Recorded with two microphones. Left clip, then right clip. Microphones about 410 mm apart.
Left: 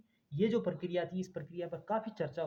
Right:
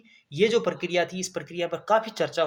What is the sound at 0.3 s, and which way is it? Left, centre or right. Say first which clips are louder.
Speech: right 11 dB; left.